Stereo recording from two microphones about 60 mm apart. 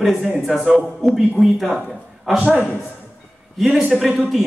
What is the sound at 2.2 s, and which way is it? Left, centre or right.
Speech, centre.